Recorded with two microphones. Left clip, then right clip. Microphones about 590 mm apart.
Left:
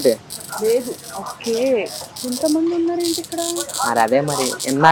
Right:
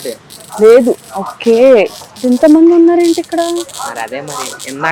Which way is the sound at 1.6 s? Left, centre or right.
Right.